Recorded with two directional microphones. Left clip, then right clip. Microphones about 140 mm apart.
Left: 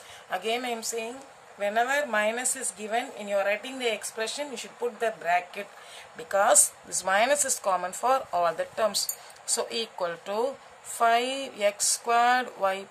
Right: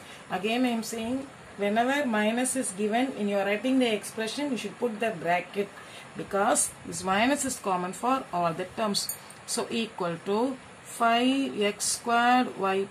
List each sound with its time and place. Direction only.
0.3 s a woman's voice: 80° left
6.3 s speech: 80° left; by 12.8 s 55° left (ahead or behind)